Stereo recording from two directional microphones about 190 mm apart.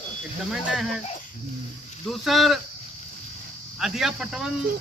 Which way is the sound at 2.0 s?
Centre (ahead or behind).